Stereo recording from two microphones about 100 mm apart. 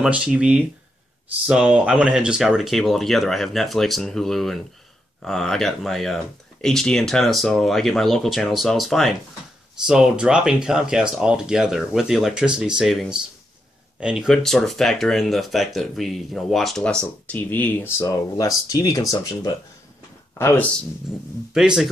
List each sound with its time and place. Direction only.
0.0 s speech: 10° right (ahead or behind)
14.3 s speech: 5° left (ahead or behind); by 19.0 s 35° left (ahead or behind)
20.3 s speech: 25° left (ahead or behind)
21.1 s speech: 5° right (ahead or behind)